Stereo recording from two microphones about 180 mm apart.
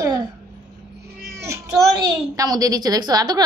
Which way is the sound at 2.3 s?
20° right (ahead or behind).